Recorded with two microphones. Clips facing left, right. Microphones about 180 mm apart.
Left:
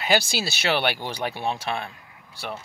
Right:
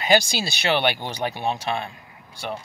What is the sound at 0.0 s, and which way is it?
Speech, 5° left (ahead or behind).